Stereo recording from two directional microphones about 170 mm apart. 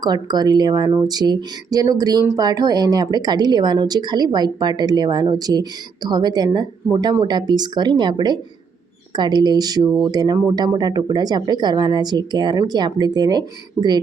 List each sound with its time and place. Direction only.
0.0 s speech: 25° right (ahead or behind)